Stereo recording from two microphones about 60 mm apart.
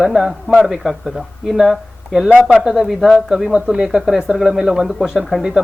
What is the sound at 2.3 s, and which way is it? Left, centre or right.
Speech, right.